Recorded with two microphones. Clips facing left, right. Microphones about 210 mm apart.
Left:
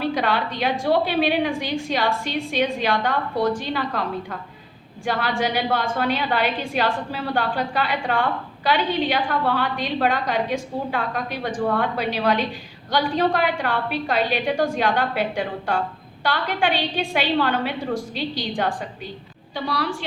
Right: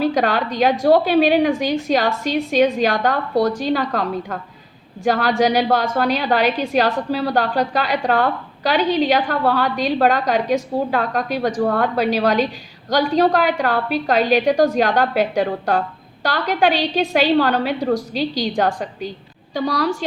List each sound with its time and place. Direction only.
0.0 s a woman's voice: 40° right (ahead or behind)